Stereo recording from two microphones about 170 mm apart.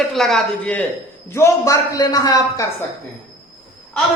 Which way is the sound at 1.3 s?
15° left (ahead or behind).